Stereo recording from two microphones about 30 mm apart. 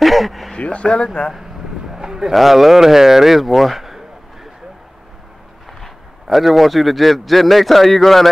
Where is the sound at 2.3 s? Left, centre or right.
Centre.